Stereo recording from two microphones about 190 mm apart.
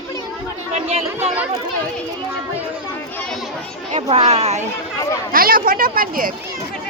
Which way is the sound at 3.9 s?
35° right (ahead or behind).